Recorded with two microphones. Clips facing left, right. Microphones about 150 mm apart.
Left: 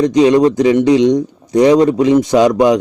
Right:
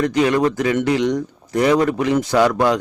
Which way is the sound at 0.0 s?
20° left (ahead or behind).